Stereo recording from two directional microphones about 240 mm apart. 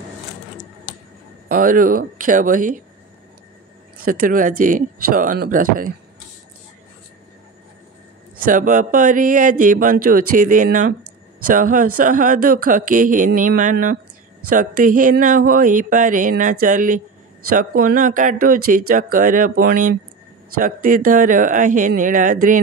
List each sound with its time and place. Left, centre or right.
1.5 s speech: right
4.0 s speech: right
8.5 s speech: right